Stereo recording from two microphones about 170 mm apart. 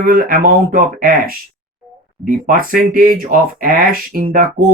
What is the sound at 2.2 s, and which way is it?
Speech, 55° right (ahead or behind).